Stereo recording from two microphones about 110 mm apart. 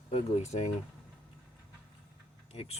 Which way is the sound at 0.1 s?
85° left.